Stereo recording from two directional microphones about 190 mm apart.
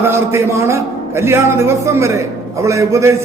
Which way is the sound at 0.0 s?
15° right (ahead or behind).